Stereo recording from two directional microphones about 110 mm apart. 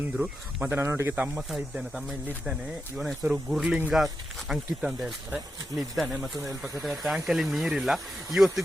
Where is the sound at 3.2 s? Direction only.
10° right (ahead or behind).